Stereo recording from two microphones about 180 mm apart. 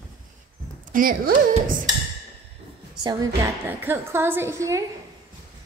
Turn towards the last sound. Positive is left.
turn(degrees=-15)  # may be behind; listen again after turning